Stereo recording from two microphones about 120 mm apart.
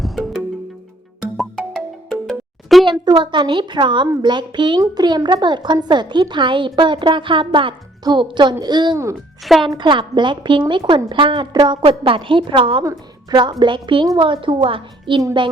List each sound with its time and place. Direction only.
0.0 s music: centre (ahead or behind)
1.4 s music: 5° left (ahead or behind)
2.8 s a sound: 40° right (ahead or behind)
3.2 s speech: 40° right (ahead or behind)
9.4 s speech: centre (ahead or behind)
9.6 s a woman's voice: 40° right (ahead or behind)
12.8 s a woman's voice: 25° right (ahead or behind)
13.4 s a woman's voice: 40° right (ahead or behind)
15.2 s speech: 35° right (ahead or behind)